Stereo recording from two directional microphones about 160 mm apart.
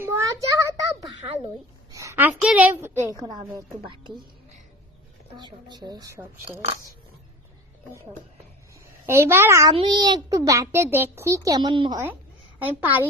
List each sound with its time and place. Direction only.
0.0 s a sound: 20° right (ahead or behind)
2.3 s a woman's voice: 5° right (ahead or behind); by 3.9 s 25° right (ahead or behind)
5.4 s a child's voice: 30° right (ahead or behind)
9.0 s a woman's voice: 15° right (ahead or behind)
9.7 s a child's voice: 30° right (ahead or behind)
12.5 s a woman's voice: 10° right (ahead or behind)